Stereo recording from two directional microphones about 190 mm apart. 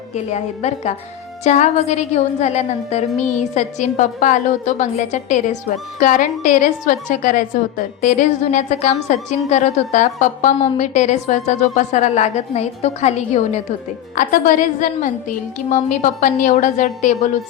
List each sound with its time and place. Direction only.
0.1 s a woman's voice: 35° left (ahead or behind)